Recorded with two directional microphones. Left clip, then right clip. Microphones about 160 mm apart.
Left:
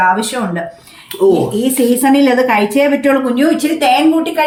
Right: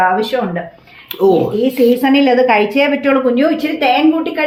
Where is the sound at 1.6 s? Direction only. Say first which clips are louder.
Right 1 dB; 15° right (ahead or behind).